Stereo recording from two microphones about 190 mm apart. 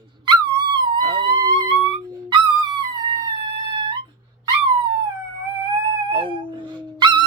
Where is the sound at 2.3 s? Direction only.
25° right (ahead or behind).